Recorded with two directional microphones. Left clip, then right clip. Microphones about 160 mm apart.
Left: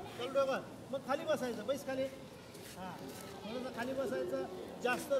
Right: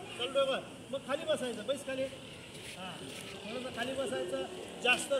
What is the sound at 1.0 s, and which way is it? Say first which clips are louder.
Speech: right 2 dB; 10° left (ahead or behind).